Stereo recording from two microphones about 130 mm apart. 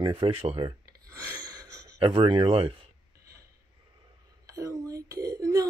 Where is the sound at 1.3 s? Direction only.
30° right (ahead or behind).